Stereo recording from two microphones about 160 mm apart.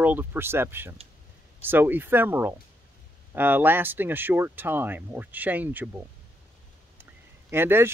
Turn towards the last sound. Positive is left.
turn(degrees=-15)  # may be behind; listen again after turning